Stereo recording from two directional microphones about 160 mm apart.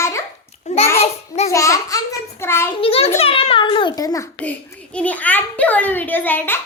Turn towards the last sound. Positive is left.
turn(degrees=10)  # may be behind; listen again after turning